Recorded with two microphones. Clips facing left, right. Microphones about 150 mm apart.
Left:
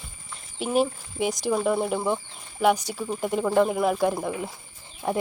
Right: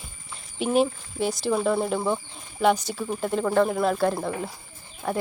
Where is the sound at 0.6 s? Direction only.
5° left (ahead or behind).